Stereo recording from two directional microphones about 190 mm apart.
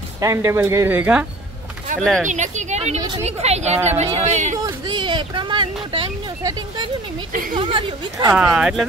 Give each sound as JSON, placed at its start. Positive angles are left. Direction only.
{"t": 0.2, "sound": "speech", "side_deg": -15}
{"t": 2.0, "sound": "speech", "side_deg": 5}
{"t": 2.2, "sound": "speech", "side_deg": -40}
{"t": 4.6, "sound": "speech", "side_deg": -25}
{"t": 8.3, "sound": "speech", "side_deg": -5}